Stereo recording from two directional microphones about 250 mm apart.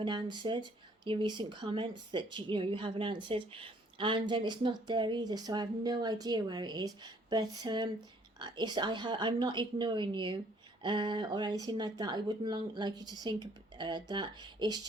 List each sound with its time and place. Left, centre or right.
0.0 s speech: centre